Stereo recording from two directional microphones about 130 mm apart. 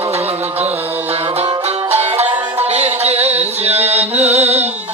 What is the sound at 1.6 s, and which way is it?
Music, 55° right (ahead or behind).